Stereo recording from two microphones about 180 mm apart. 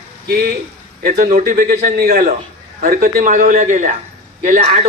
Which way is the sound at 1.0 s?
45° right (ahead or behind).